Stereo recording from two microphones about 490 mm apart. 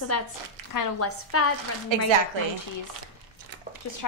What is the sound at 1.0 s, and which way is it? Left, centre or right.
Chopping, left.